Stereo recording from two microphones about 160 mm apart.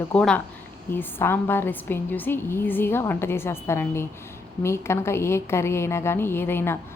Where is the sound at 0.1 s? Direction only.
5° left (ahead or behind).